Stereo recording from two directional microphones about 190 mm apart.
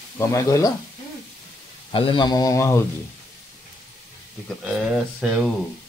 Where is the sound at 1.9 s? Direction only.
25° left (ahead or behind).